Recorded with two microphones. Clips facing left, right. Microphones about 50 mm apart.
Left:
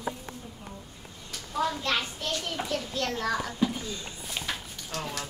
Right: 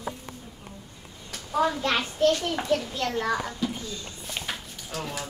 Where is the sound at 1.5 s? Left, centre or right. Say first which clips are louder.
Right 4 dB; right.